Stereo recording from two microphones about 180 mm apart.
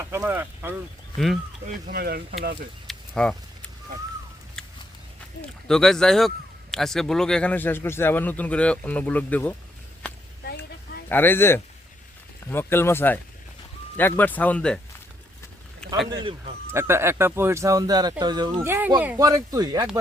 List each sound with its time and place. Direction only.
0.0 s speech: 10° right (ahead or behind)
1.6 s speech: 60° right (ahead or behind)
2.8 s a sound: 5° left (ahead or behind)
4.6 s a sound: 5° left (ahead or behind)
5.4 s speech: 5° left (ahead or behind)
11.1 s speech: 10° left (ahead or behind)
15.8 s a sound: 5° left (ahead or behind)
16.7 s speech: 15° right (ahead or behind)
18.6 s speech: 10° right (ahead or behind)
19.2 s speech: 20° right (ahead or behind)